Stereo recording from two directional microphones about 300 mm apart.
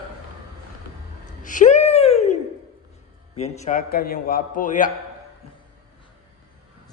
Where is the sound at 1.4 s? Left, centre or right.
Left.